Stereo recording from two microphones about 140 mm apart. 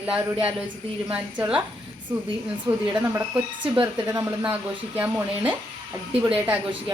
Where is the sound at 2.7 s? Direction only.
25° right (ahead or behind).